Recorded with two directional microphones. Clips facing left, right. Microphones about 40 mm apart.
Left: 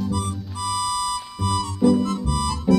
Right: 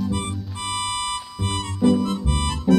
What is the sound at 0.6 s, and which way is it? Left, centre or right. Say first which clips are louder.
Music: left 3 dB; right.